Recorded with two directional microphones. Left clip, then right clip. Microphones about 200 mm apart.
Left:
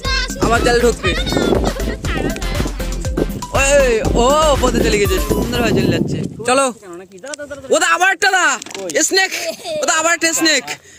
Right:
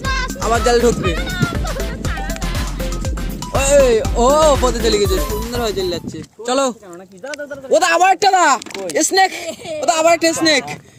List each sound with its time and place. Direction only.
0.4 s speech: 20° right (ahead or behind)
1.0 s speech: 35° right (ahead or behind)
2.0 s music: 35° right (ahead or behind)
3.5 s music: centre (ahead or behind)
6.4 s speech: 5° left (ahead or behind)
7.7 s music: 10° left (ahead or behind)